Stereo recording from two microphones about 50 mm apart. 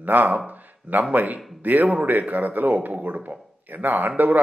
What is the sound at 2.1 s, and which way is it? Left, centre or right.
Speech, right.